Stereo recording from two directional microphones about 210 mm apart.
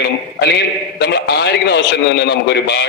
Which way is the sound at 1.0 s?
55° left (ahead or behind).